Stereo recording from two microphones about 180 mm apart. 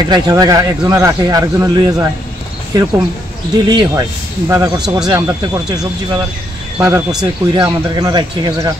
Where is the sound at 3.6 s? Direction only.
25° right (ahead or behind).